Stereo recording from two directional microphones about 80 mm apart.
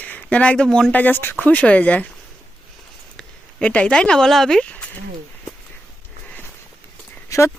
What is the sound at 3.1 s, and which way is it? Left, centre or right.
Speech, centre.